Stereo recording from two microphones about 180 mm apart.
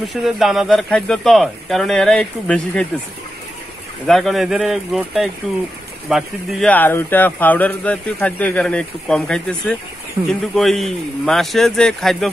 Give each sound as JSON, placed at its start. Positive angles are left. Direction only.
{"t": 0.1, "sound": "speech", "side_deg": 0}
{"t": 4.0, "sound": "speech", "side_deg": 0}
{"t": 6.7, "sound": "speech", "side_deg": 10}